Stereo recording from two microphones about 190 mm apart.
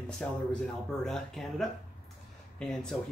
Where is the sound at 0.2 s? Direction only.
5° left (ahead or behind).